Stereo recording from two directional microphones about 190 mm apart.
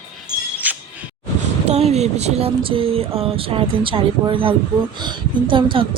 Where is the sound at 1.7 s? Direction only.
35° right (ahead or behind).